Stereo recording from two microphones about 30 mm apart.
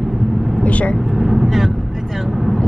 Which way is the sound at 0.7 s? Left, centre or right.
Left.